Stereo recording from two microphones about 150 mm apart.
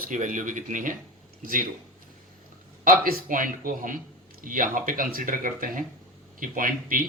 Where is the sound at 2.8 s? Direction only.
65° right (ahead or behind).